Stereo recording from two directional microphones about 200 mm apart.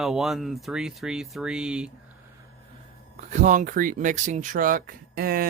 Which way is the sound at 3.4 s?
40° right (ahead or behind).